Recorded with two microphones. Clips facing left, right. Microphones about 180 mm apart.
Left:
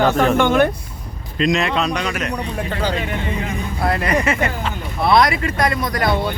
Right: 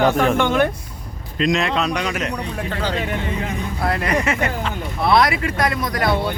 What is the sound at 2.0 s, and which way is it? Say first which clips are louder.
Speech: even; 20° right (ahead or behind).